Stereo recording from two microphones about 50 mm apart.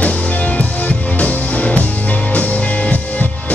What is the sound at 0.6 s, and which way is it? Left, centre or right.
Music, left.